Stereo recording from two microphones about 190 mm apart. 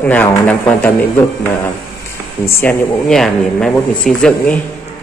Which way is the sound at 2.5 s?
10° left (ahead or behind).